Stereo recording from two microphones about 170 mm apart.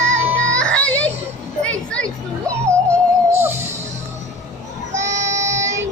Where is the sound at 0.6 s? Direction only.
5° left (ahead or behind).